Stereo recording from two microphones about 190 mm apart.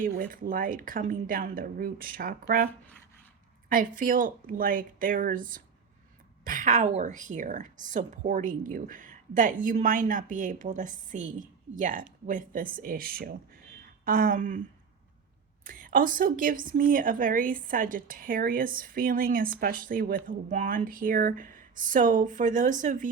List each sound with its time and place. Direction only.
0.0 s a woman's voice: 45° right (ahead or behind)
3.7 s a woman's voice: 45° right (ahead or behind)
15.6 s a woman's voice: 45° right (ahead or behind)